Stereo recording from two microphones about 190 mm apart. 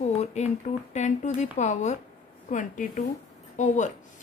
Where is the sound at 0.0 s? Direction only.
35° left (ahead or behind).